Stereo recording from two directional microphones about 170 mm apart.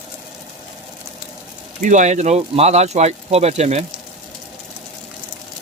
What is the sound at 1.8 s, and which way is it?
Speech, 45° right (ahead or behind).